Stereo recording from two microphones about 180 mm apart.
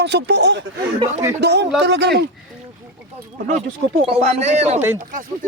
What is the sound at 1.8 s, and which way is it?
Speech, 85° right.